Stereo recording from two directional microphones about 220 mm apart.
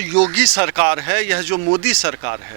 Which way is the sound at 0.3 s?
10° right (ahead or behind).